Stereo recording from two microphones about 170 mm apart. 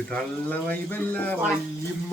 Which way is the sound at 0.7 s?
10° left (ahead or behind).